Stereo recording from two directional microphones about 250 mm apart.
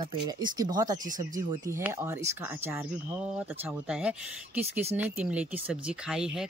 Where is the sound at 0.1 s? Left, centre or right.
Centre.